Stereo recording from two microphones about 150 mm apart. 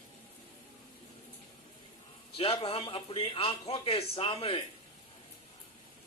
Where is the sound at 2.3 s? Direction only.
40° left (ahead or behind).